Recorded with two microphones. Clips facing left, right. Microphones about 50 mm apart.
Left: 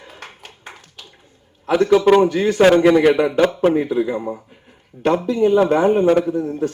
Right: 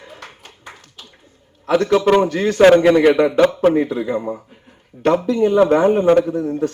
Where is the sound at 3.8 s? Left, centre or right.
Centre.